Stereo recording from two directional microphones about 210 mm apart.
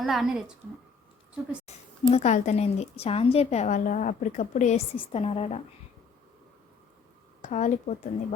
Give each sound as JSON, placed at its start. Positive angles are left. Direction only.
{"t": 0.0, "sound": "speech", "side_deg": 0}
{"t": 1.6, "sound": "speech", "side_deg": 30}
{"t": 7.4, "sound": "speech", "side_deg": 35}